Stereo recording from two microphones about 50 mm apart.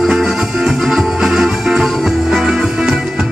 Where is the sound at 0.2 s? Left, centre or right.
Centre.